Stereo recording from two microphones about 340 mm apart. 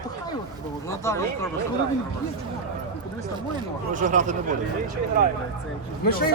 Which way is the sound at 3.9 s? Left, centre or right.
Right.